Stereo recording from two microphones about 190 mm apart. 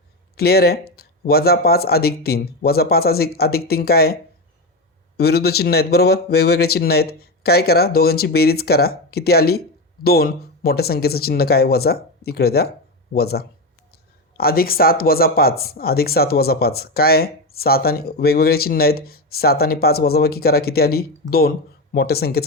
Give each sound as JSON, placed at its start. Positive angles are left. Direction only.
{"t": 0.3, "sound": "speech", "side_deg": 55}